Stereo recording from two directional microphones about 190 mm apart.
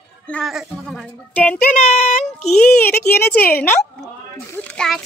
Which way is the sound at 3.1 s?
55° left (ahead or behind).